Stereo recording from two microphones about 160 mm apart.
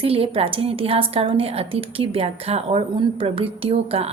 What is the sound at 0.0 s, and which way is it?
A woman's voice, 35° right (ahead or behind).